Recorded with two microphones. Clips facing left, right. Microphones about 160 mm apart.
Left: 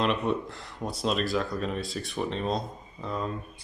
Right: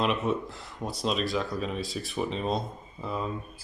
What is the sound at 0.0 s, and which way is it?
Speech, centre (ahead or behind).